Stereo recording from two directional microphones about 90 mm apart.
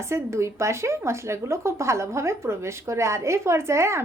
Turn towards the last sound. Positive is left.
turn(degrees=-30)  # may be behind; listen again after turning